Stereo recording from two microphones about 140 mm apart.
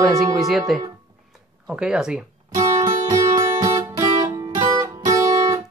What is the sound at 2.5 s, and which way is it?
Music, 25° right (ahead or behind).